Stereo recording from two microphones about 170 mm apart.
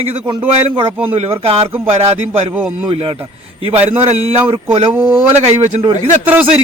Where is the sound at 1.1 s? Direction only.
35° right (ahead or behind).